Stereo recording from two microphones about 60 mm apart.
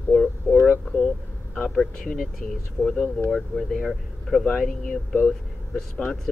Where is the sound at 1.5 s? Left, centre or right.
Centre.